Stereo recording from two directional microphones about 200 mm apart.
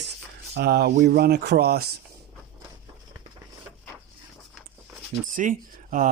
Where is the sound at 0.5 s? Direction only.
55° right (ahead or behind).